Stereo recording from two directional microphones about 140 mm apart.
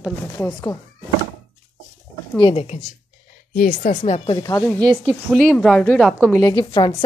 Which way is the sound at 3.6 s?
90° left.